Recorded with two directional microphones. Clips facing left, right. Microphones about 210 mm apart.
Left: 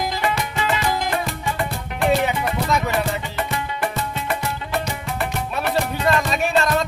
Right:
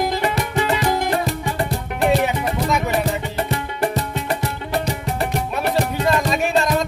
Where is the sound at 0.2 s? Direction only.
40° right (ahead or behind).